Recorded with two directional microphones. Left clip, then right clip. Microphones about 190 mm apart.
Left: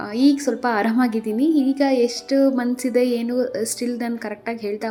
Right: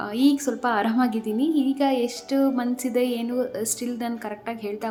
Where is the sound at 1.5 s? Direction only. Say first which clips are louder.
Left 4 dB; 10° right (ahead or behind).